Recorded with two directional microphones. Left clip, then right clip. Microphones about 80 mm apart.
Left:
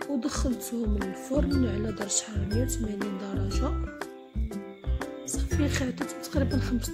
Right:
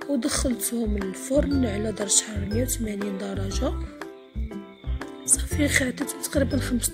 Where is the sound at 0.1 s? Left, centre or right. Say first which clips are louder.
Right 7 dB; centre.